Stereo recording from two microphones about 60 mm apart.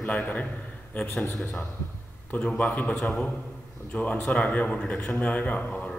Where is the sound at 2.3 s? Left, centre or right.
Centre.